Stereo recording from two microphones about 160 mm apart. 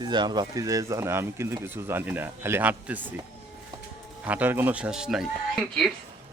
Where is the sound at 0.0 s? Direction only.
25° right (ahead or behind); by 3.0 s 10° right (ahead or behind).